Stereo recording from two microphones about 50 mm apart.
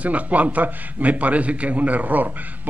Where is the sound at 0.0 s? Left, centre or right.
Right.